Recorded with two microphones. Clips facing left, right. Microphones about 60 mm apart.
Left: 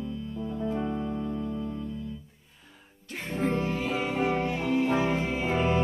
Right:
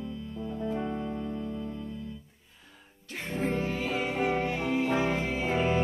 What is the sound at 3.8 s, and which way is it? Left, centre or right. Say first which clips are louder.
Music: left 1 dB; centre.